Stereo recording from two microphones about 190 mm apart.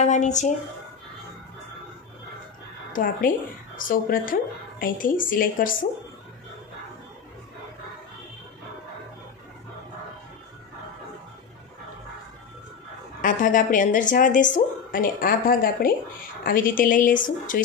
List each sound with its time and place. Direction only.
0.0 s speech: 40° left (ahead or behind)
2.9 s speech: 45° left (ahead or behind)
13.2 s speech: 45° left (ahead or behind)